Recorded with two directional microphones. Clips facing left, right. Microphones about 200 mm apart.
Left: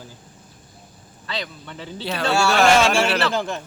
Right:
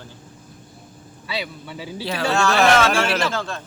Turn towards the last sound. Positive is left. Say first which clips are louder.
# left 3 dB
turn(degrees=15)  # may be behind; listen again after turning